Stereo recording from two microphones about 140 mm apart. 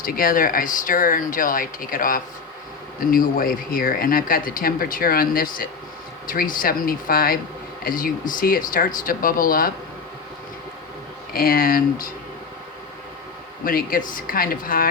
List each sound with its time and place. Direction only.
0.0 s speech: 90° left
11.3 s speech: 90° left
13.7 s speech: 90° left